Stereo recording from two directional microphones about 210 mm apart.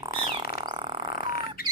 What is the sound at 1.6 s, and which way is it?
Music, 45° left (ahead or behind).